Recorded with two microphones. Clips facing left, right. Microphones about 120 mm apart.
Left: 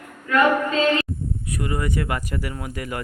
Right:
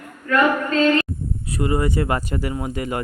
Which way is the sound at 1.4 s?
30° right (ahead or behind).